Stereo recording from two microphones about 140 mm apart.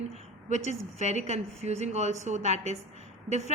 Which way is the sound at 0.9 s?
55° right (ahead or behind).